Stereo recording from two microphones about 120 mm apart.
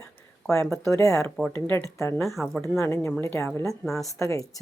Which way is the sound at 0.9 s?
25° left (ahead or behind).